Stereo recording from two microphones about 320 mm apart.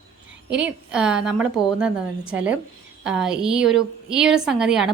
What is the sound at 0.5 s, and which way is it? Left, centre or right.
A woman's voice, centre.